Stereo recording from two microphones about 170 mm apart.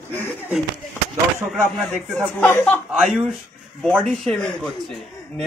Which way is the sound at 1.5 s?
5° left (ahead or behind).